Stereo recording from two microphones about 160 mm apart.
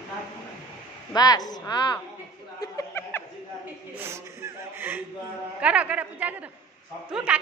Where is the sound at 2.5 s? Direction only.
20° left (ahead or behind).